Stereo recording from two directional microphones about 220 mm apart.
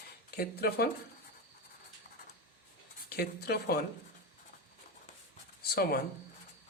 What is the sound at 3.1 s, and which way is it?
Speech, 45° left (ahead or behind).